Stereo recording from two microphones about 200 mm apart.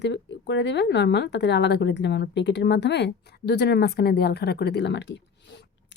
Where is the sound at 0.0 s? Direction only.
60° left (ahead or behind).